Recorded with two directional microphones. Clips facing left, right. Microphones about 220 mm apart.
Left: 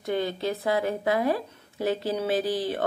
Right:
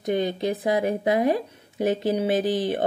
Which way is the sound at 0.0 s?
15° right (ahead or behind).